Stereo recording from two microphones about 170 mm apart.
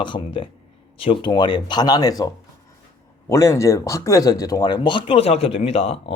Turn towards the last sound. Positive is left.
turn(degrees=35)  # may be behind; listen again after turning